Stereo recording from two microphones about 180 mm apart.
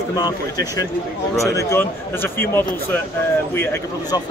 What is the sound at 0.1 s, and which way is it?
A man's voice, 20° left (ahead or behind).